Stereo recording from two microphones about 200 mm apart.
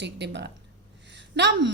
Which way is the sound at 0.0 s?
60° right (ahead or behind).